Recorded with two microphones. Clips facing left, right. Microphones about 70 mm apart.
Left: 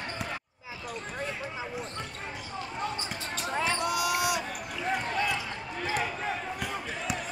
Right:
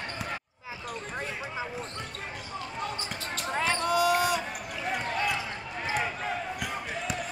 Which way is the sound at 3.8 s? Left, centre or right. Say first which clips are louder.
Right 4 dB; right.